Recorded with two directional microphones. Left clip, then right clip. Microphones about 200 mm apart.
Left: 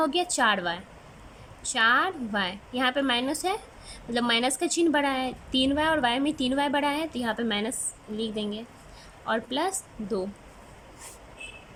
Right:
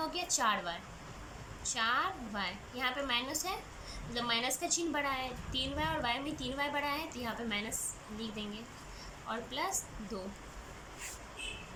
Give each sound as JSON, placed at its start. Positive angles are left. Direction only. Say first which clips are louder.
{"t": 0.0, "sound": "a woman's voice", "louder": "left 9 dB", "side_deg": 45}